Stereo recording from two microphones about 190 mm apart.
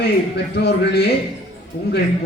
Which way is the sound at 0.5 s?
60° left (ahead or behind).